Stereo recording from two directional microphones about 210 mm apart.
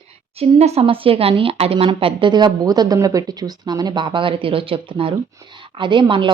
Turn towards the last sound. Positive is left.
turn(degrees=-25)  # may be behind; listen again after turning